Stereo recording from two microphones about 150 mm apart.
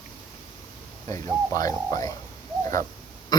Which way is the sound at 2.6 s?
20° left (ahead or behind).